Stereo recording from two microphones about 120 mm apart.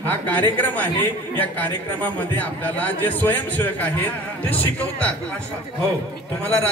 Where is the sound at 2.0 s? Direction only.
15° left (ahead or behind).